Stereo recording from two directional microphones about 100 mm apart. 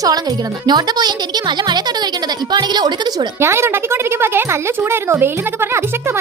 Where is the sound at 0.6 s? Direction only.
45° right (ahead or behind).